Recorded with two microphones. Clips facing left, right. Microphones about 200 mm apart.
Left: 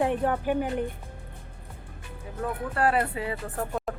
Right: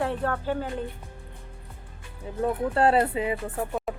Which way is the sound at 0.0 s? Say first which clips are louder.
Left 2 dB; 15° left (ahead or behind).